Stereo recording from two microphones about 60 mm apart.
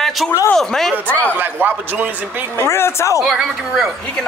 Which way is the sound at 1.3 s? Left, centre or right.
Right.